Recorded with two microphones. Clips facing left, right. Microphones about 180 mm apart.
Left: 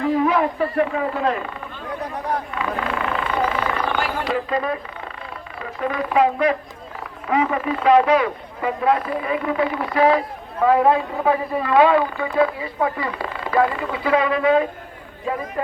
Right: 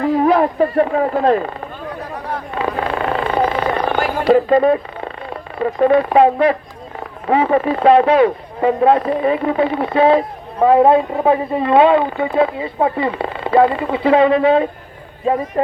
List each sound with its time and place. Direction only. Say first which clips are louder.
0.0 s speech: right 5 dB; 40° right (ahead or behind)
2.6 s vehicle: right 5 dB; 35° right (ahead or behind)
4.5 s speech: right 10 dB; 30° right (ahead or behind)
5.5 s speech: right 11 dB; 45° right (ahead or behind)
5.9 s speech: right 5 dB; 30° right (ahead or behind)